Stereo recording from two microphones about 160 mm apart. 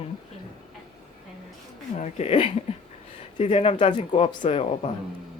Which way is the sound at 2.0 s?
40° left (ahead or behind).